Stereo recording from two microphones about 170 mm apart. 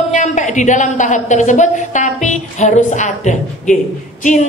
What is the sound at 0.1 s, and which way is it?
A woman's voice, 45° left (ahead or behind).